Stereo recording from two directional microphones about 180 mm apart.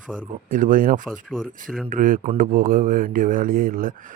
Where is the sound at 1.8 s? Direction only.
50° right (ahead or behind).